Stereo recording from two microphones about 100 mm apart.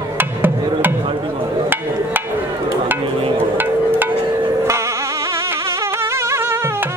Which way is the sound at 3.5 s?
20° right (ahead or behind).